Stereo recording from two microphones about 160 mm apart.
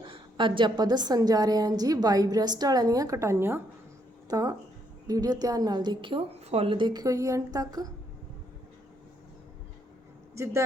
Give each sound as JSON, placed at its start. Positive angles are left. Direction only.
{"t": 0.0, "sound": "a woman's voice", "side_deg": -30}
{"t": 10.3, "sound": "a man's voice", "side_deg": -20}